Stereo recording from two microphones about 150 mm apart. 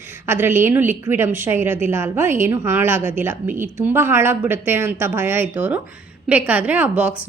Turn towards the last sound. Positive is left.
turn(degrees=-10)  # may be behind; listen again after turning